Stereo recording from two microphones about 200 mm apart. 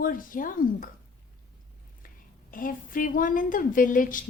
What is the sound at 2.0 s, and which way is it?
A woman's voice, 45° left (ahead or behind).